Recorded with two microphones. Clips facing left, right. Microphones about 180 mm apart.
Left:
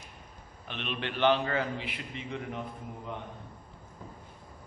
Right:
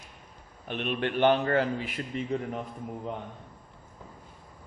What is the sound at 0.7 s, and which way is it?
A man's voice, 50° right (ahead or behind).